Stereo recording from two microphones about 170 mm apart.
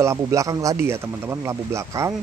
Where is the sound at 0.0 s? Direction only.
15° right (ahead or behind).